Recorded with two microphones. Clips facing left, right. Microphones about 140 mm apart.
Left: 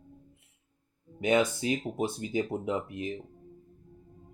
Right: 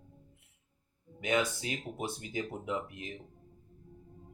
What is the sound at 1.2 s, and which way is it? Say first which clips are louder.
Speech: left 6 dB; 25° left (ahead or behind).